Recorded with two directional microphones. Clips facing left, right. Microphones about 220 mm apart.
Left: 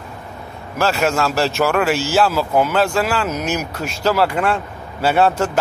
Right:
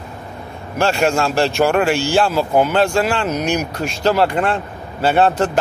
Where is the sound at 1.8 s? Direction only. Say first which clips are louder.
Right 1 dB; 5° left (ahead or behind).